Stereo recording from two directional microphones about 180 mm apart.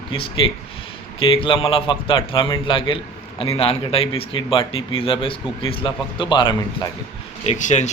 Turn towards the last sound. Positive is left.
turn(degrees=40)  # may be behind; listen again after turning